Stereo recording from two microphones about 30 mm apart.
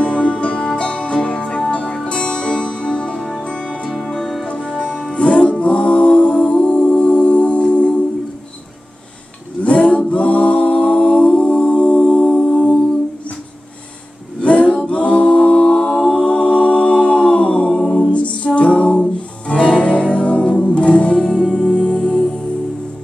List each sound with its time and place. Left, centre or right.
0.0 s music: left
9.7 s music: left
14.4 s male singing: left
14.9 s a capella: left
15.9 s music: centre
16.3 s a capella: left
18.1 s music: left
21.4 s music: left
21.6 s music: left